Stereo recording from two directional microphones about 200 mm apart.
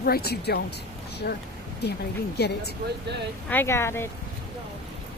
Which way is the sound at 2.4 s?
55° left (ahead or behind).